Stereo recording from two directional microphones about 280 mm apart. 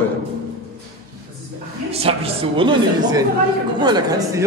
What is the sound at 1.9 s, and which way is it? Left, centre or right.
A man's voice, right.